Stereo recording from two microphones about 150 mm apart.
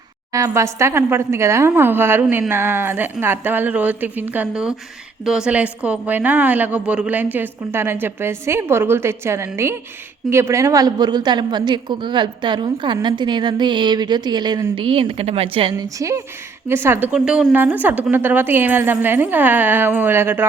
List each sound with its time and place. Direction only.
0.3 s a woman's voice: 20° right (ahead or behind); by 15.7 s 40° right (ahead or behind)
15.7 s a woman's voice: 20° right (ahead or behind)